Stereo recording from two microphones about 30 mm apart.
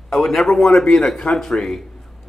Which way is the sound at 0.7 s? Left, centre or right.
Left.